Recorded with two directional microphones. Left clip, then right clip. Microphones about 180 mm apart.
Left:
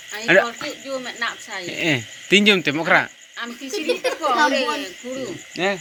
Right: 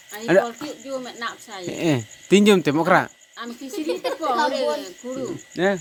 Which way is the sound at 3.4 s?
85° right.